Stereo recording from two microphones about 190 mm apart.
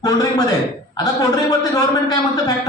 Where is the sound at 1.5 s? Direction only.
20° left (ahead or behind).